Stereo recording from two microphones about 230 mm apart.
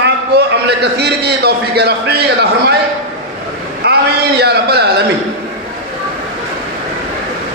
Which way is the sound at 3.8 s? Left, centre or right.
Right.